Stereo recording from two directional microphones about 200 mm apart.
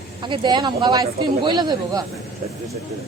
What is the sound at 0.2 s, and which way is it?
Speech, 25° right (ahead or behind).